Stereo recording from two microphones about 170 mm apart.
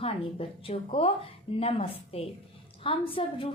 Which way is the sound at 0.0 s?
35° left (ahead or behind).